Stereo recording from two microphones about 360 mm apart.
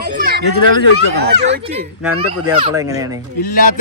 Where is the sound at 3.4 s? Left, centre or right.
Left.